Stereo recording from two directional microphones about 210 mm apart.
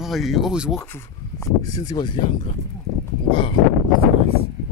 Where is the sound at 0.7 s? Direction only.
10° left (ahead or behind).